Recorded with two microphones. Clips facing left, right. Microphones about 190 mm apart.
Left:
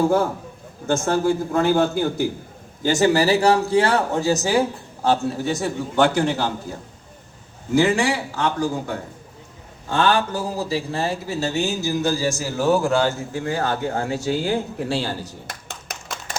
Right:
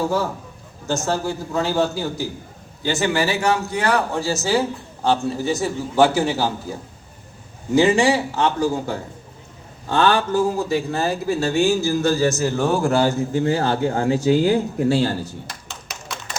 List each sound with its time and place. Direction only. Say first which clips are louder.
0.9 s a man's voice: left 3 dB; 55° left (ahead or behind)
2.8 s a man's voice: left 3 dB; 40° left (ahead or behind); by 4.6 s 15° left (ahead or behind)
5.0 s a man's voice: even; centre (ahead or behind)
7.8 s a man's voice: right 3 dB; 20° right (ahead or behind)
9.9 s speech: right 2 dB; 40° right (ahead or behind)
10.6 s speech: right 3 dB; 30° left (ahead or behind)
12.0 s a man's voice: right 4 dB; 55° right (ahead or behind)
12.3 s a man's voice: even; 10° left (ahead or behind)
13.1 s speech: right 5 dB; 20° right (ahead or behind); by 15.1 s 45° right (ahead or behind)
15.5 s a sound: left 1 dB; 55° left (ahead or behind)